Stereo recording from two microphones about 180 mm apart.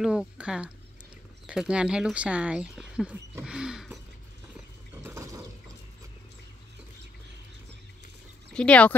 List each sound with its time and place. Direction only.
0.0 s speech: 5° right (ahead or behind)
5.0 s a sound: 15° right (ahead or behind)
8.5 s speech: 5° left (ahead or behind)